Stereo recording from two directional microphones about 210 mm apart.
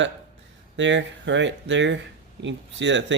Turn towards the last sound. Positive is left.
turn(degrees=-60)  # may be behind; listen again after turning